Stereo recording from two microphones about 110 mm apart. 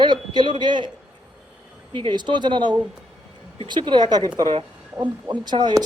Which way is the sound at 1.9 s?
45° right (ahead or behind).